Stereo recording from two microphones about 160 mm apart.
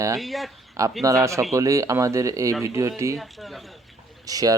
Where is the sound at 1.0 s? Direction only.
20° right (ahead or behind).